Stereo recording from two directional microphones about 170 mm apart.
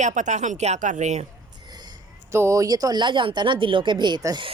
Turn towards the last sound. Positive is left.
turn(degrees=-25)  # may be behind; listen again after turning